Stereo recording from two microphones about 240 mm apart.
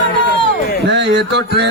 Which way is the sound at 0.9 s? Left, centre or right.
Right.